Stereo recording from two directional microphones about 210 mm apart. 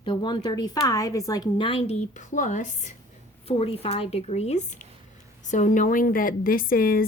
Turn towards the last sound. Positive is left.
turn(degrees=45)  # may be behind; listen again after turning